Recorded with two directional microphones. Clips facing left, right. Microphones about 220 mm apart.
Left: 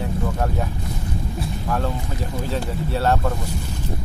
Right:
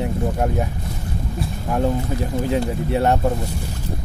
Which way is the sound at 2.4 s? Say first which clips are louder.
Right 5 dB; 20° right (ahead or behind).